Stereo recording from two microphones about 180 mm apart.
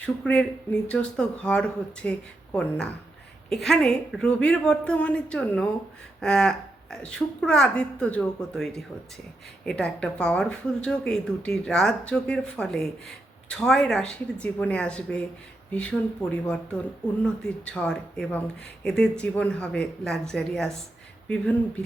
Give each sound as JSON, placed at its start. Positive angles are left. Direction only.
{"t": 0.0, "sound": "speech", "side_deg": 5}